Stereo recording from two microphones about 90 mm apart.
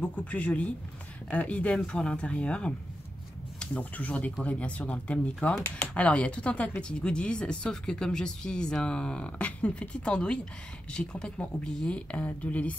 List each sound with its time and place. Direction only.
0.0 s speech: 15° left (ahead or behind)